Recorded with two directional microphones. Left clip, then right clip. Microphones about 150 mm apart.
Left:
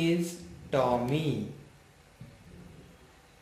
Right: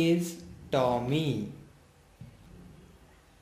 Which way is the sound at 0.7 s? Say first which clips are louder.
Even; 60° right (ahead or behind).